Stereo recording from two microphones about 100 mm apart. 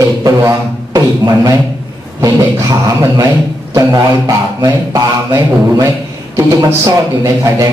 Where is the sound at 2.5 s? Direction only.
30° right (ahead or behind).